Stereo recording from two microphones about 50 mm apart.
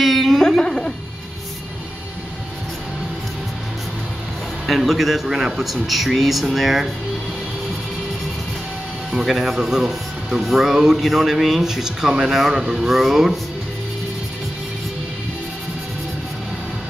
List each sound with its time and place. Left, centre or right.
0.0 s a sound: centre
4.6 s speech: centre
9.1 s speech: centre
9.4 s speech: centre